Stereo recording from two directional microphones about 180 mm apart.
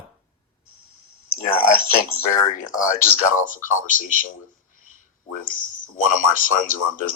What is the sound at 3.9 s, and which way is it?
Speech, 50° left (ahead or behind).